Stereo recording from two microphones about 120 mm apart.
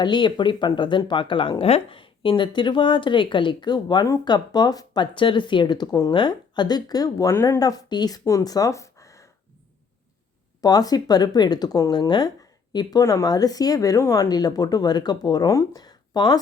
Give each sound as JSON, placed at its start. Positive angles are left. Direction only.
{"t": 0.0, "sound": "speech", "side_deg": 40}
{"t": 7.6, "sound": "speech", "side_deg": 35}
{"t": 10.6, "sound": "speech", "side_deg": 30}